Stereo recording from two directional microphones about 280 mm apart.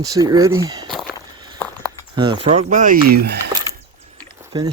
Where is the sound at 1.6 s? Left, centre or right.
Centre.